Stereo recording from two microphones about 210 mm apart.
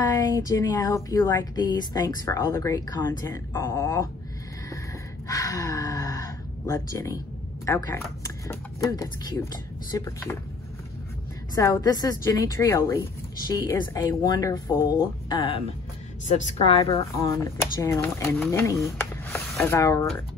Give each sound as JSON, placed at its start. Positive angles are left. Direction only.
{"t": 0.0, "sound": "speech", "side_deg": 15}
{"t": 5.3, "sound": "gasp", "side_deg": 15}
{"t": 7.6, "sound": "speech", "side_deg": 15}
{"t": 11.5, "sound": "speech", "side_deg": 15}